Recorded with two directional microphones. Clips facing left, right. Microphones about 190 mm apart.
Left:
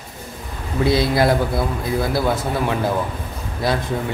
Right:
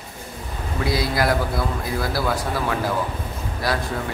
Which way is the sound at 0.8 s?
25° left (ahead or behind).